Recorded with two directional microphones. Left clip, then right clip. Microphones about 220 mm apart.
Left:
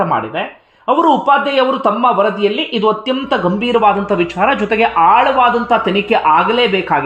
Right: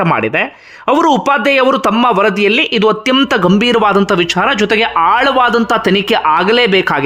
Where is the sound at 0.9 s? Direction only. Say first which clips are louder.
Even; 30° right (ahead or behind).